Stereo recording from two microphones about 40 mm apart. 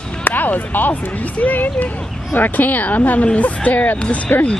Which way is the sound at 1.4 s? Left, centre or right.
Left.